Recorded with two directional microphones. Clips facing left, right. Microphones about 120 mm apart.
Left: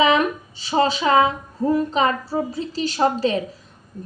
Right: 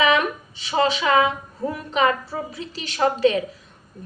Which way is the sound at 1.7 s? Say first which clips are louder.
Left 2 dB; 35° left (ahead or behind).